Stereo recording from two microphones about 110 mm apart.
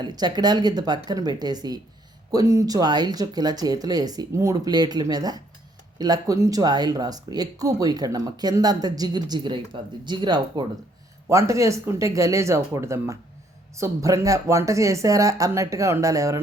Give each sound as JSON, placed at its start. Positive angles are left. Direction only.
{"t": 0.0, "sound": "speech", "side_deg": -40}
{"t": 11.3, "sound": "speech", "side_deg": -30}